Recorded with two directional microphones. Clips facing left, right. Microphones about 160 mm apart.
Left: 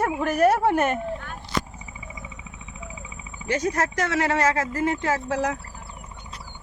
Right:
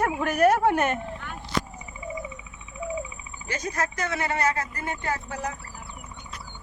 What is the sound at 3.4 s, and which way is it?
Speech, 70° left (ahead or behind).